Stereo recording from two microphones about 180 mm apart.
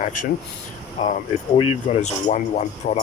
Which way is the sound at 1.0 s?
40° left (ahead or behind).